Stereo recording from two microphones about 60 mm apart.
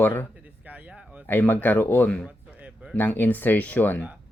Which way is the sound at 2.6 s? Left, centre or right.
Centre.